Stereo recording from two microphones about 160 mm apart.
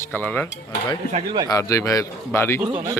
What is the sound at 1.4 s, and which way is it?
A man's voice, 20° left (ahead or behind).